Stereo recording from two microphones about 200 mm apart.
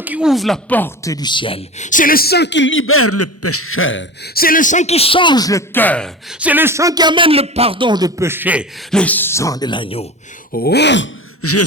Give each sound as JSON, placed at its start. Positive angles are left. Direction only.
{"t": 0.0, "sound": "speech", "side_deg": -5}
{"t": 4.4, "sound": "speech", "side_deg": 45}
{"t": 6.4, "sound": "speech", "side_deg": -10}
{"t": 8.9, "sound": "speech", "side_deg": 5}
{"t": 10.5, "sound": "speech", "side_deg": 50}
{"t": 11.4, "sound": "a sound", "side_deg": 90}